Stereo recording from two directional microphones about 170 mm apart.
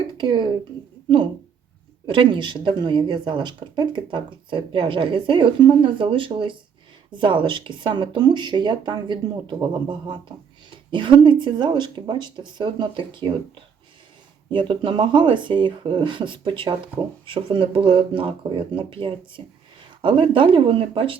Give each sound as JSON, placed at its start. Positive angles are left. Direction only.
{"t": 0.2, "sound": "speech", "side_deg": -25}
{"t": 2.0, "sound": "speech", "side_deg": -30}
{"t": 14.5, "sound": "speech", "side_deg": -30}